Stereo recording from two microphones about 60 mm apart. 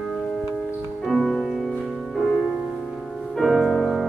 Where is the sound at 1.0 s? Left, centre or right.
Centre.